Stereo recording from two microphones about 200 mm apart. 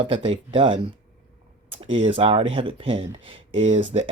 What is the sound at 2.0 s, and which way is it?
Speech, 25° right (ahead or behind).